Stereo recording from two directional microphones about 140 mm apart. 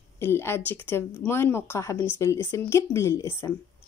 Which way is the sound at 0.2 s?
15° left (ahead or behind).